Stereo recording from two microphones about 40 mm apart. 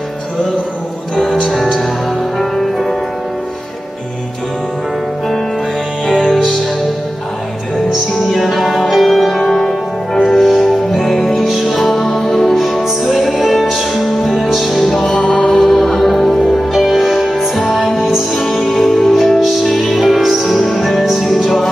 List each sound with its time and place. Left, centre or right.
1.5 s music: centre
6.0 s music: centre
8.2 s music: centre
15.0 s music: centre
15.5 s music: centre